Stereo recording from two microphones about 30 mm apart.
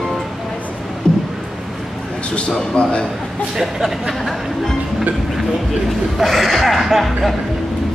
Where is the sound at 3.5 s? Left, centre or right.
Centre.